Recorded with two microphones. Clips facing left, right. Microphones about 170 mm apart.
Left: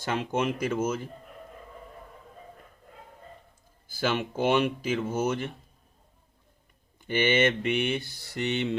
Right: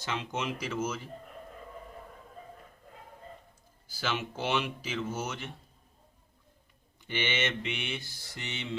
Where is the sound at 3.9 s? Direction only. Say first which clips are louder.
Left 6 dB; 50° left (ahead or behind).